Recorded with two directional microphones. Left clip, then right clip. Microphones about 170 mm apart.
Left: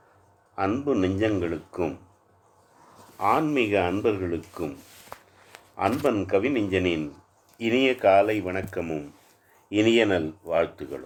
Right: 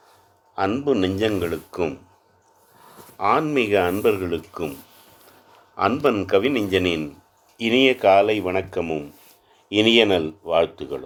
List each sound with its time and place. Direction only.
0.5 s speech: 30° right (ahead or behind)
3.2 s speech: 40° right (ahead or behind)
5.7 s speech: 40° right (ahead or behind)